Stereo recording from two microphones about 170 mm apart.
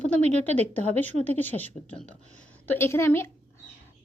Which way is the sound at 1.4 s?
10° left (ahead or behind).